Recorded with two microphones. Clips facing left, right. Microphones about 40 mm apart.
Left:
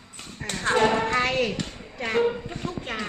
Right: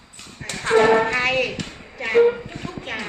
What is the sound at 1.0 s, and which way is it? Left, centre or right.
Speech, right.